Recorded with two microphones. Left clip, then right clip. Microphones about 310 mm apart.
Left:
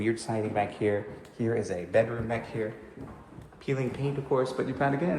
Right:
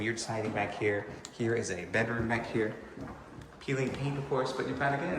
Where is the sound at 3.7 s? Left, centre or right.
Centre.